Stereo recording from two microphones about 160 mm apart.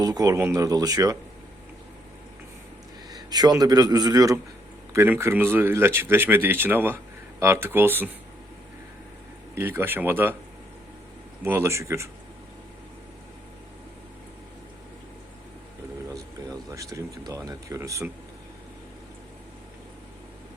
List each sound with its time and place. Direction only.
0.0 s speech: 25° right (ahead or behind)
3.1 s a man's voice: 25° right (ahead or behind)
9.6 s speech: 15° right (ahead or behind)
11.4 s speech: 15° right (ahead or behind)
16.9 s speech: 20° right (ahead or behind)